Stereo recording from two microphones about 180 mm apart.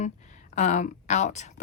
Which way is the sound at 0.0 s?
40° left (ahead or behind).